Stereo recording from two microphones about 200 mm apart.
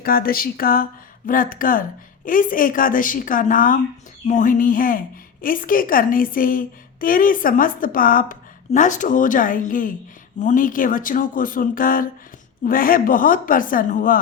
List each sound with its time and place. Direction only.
0.0 s a woman's voice: 45° left (ahead or behind)